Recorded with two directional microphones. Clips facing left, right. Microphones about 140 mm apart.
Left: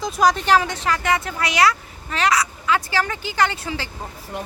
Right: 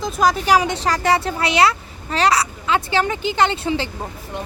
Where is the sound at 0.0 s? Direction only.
Centre (ahead or behind).